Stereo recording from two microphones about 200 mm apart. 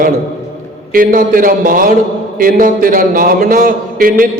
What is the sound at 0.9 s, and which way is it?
A man's voice, 45° right (ahead or behind).